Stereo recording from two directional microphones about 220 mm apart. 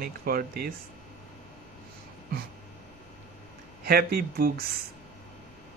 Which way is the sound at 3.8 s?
45° right (ahead or behind).